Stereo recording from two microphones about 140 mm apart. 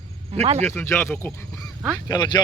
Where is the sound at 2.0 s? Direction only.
30° left (ahead or behind).